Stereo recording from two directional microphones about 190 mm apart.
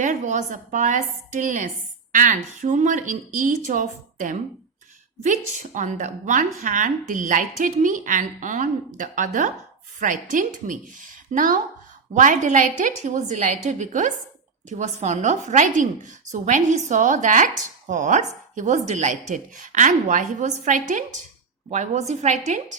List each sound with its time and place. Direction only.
0.0 s a woman's voice: 40° right (ahead or behind)